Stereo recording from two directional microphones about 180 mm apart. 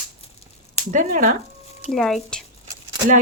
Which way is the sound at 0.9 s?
45° right (ahead or behind).